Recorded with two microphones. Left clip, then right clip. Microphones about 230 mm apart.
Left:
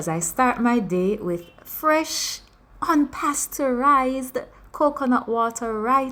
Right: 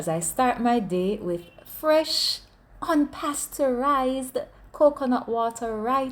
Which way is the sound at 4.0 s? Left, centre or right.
Left.